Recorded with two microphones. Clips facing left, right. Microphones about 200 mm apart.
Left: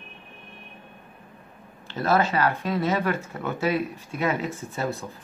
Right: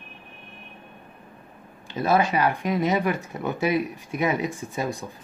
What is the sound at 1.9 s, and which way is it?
Speech, 15° right (ahead or behind).